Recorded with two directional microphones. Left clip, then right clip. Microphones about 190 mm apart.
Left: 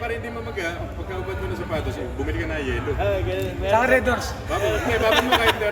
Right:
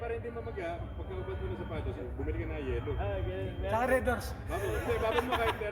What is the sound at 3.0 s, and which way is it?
Speech, 30° left (ahead or behind).